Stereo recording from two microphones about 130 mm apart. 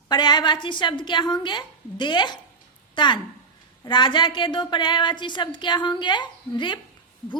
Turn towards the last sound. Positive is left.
turn(degrees=35)  # may be behind; listen again after turning